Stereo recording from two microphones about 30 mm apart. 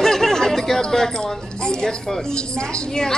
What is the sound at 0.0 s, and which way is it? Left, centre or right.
Chatter, centre.